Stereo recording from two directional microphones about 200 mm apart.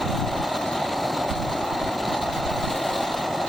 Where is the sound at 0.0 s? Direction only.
Centre (ahead or behind).